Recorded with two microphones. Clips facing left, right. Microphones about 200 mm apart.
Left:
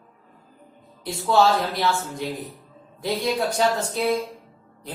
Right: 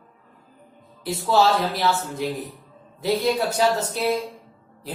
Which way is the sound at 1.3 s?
5° right (ahead or behind).